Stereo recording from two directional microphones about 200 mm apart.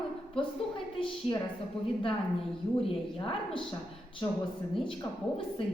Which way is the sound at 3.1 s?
25° left (ahead or behind).